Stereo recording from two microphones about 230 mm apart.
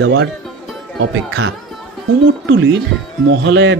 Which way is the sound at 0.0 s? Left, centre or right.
Right.